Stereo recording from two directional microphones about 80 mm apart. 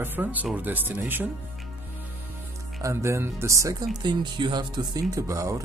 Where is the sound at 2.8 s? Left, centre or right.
Right.